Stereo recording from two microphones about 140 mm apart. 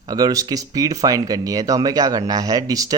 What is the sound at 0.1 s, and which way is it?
Speech, 25° right (ahead or behind).